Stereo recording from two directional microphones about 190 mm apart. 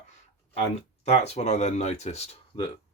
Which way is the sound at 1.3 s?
35° left (ahead or behind).